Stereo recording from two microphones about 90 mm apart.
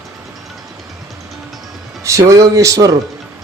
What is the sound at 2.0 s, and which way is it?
Speech, 35° right (ahead or behind).